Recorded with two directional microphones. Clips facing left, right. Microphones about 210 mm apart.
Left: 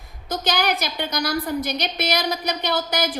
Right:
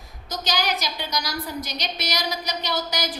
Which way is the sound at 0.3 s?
55° left (ahead or behind).